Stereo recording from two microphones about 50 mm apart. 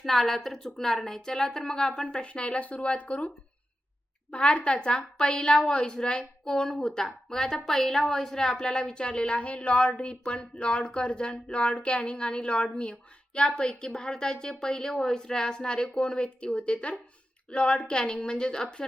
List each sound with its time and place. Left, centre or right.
0.0 s a woman's voice: centre